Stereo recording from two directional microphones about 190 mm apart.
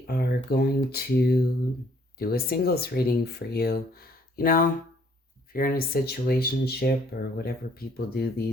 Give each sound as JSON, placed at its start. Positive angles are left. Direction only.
{"t": 0.1, "sound": "speech", "side_deg": 55}